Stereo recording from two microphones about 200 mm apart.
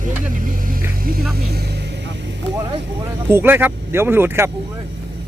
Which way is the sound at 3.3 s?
10° right (ahead or behind).